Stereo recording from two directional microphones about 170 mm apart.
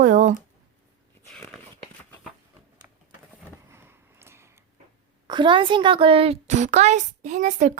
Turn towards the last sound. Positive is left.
turn(degrees=-45)  # may be behind; listen again after turning